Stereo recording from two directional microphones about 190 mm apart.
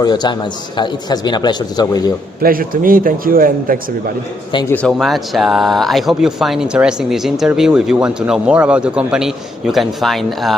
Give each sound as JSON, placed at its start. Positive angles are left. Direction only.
{"t": 0.0, "sound": "a man's voice", "side_deg": 20}
{"t": 2.4, "sound": "a man's voice", "side_deg": -50}
{"t": 4.9, "sound": "speech", "side_deg": 0}